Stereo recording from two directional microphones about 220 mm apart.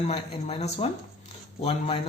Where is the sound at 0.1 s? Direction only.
30° left (ahead or behind).